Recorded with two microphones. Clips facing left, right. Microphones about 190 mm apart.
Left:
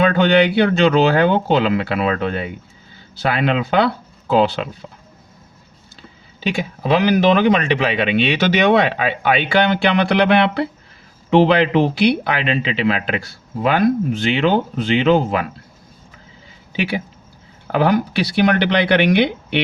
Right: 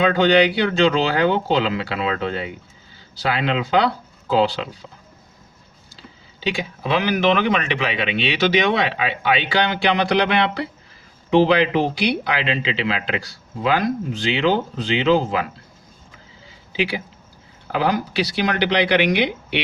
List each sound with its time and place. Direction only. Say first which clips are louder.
0.2 s speech: left 1 dB; 55° left (ahead or behind)
6.8 s speech: left 4 dB; 40° left (ahead or behind); by 15.4 s 55° left (ahead or behind)
17.7 s speech: left 5 dB; 55° left (ahead or behind)